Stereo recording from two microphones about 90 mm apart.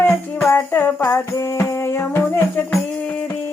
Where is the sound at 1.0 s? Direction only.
35° left (ahead or behind).